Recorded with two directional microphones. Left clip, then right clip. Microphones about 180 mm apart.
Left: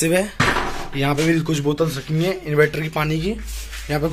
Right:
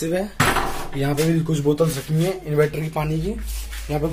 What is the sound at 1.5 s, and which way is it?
Speech, centre (ahead or behind).